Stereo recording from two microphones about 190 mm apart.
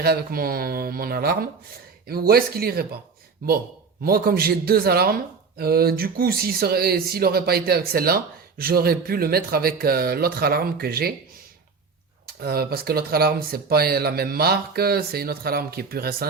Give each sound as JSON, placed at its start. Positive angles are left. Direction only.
{"t": 0.0, "sound": "speech", "side_deg": -50}
{"t": 12.4, "sound": "speech", "side_deg": -55}